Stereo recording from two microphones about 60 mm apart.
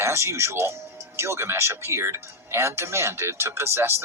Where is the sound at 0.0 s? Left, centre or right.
Right.